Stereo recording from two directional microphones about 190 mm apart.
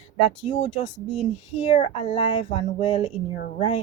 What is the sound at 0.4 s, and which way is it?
A woman's voice, 35° left (ahead or behind).